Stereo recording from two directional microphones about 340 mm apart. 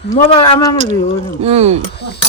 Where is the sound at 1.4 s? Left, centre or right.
Centre.